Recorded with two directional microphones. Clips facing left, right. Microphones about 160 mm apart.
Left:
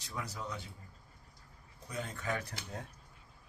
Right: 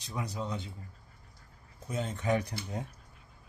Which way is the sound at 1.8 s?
25° right (ahead or behind).